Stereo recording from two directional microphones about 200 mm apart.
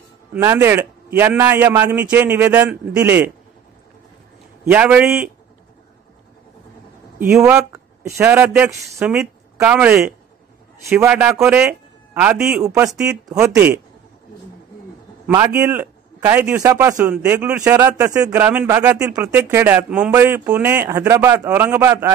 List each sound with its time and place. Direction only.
0.3 s a man's voice: 10° right (ahead or behind)
4.6 s a man's voice: 5° right (ahead or behind)
7.2 s a man's voice: 5° right (ahead or behind)
12.6 s a man's voice: 15° right (ahead or behind)
12.9 s speech: 5° right (ahead or behind)
15.3 s a man's voice: 10° right (ahead or behind)